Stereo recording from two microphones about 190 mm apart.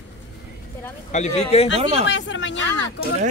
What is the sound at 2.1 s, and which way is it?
Speech, 75° left (ahead or behind).